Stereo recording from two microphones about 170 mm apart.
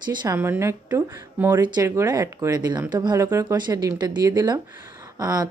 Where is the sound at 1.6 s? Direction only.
25° right (ahead or behind).